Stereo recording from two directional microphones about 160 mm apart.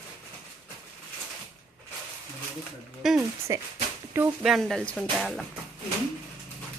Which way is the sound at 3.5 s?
20° right (ahead or behind).